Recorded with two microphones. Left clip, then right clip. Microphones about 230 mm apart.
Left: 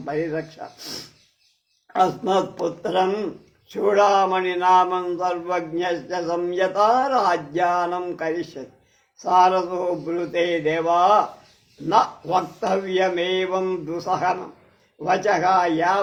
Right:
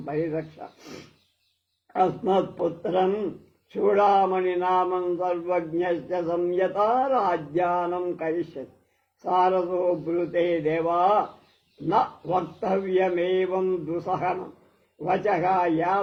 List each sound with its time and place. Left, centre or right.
0.0 s a man's voice: left
1.9 s a man's voice: left